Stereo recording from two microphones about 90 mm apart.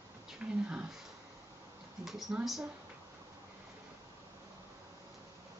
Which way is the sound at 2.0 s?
Centre (ahead or behind).